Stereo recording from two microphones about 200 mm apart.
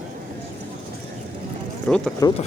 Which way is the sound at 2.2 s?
15° left (ahead or behind).